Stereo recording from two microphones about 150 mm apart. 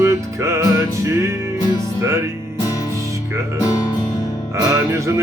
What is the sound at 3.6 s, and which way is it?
Music, 20° left (ahead or behind).